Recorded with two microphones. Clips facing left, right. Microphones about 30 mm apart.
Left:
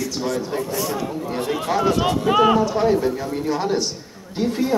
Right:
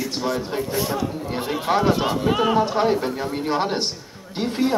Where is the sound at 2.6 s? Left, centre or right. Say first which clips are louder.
Left 1 dB; right.